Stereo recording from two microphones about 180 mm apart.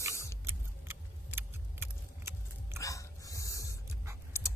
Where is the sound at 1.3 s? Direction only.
15° right (ahead or behind).